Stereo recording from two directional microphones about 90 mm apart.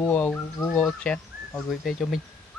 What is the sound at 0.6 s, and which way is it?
Speech, 30° left (ahead or behind).